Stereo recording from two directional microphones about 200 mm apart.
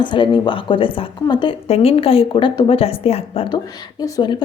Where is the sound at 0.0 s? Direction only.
25° left (ahead or behind).